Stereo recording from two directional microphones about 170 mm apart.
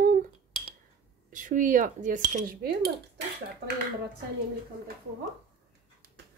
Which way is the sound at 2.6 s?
65° right (ahead or behind).